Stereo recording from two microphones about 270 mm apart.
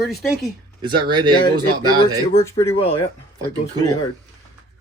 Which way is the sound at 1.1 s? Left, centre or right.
Centre.